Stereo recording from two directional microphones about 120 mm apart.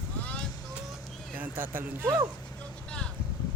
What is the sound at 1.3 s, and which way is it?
Speech, 15° right (ahead or behind).